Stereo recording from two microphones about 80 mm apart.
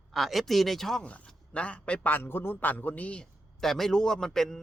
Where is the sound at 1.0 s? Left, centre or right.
Centre.